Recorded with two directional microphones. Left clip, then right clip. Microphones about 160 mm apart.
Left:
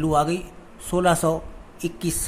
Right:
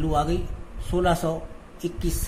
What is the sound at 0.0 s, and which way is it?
A man's voice, 20° left (ahead or behind).